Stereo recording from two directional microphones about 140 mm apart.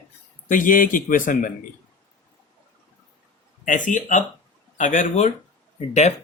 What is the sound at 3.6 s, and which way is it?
A man's voice, 65° left (ahead or behind).